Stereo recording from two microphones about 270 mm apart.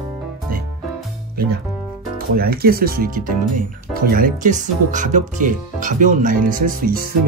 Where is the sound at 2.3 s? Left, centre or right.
Right.